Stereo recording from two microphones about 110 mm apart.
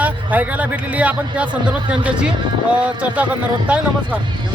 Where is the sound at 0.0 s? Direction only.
15° right (ahead or behind).